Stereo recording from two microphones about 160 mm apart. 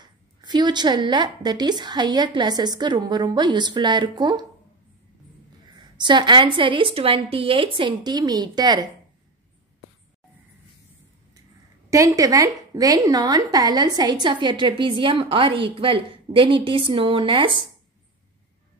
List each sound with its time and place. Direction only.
0.0 s a woman's voice: 25° right (ahead or behind)
5.8 s a woman's voice: 30° right (ahead or behind)
11.9 s a woman's voice: 20° right (ahead or behind)